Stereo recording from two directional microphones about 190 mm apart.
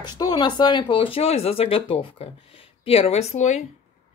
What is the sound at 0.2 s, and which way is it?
Speech, 20° left (ahead or behind).